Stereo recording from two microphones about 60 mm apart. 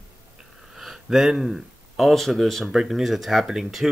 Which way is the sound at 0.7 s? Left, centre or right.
Centre.